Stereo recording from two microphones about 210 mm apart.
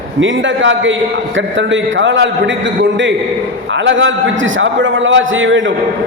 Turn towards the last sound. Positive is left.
turn(degrees=-65)  # may be behind; listen again after turning